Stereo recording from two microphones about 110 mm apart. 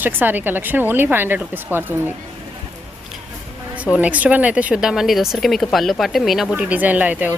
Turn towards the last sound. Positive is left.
turn(degrees=-15)  # may be behind; listen again after turning